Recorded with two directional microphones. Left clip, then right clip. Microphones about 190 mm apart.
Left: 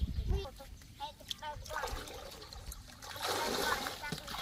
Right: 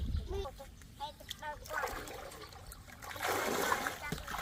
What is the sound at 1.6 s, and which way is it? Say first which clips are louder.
Water: right 3 dB; 15° right (ahead or behind).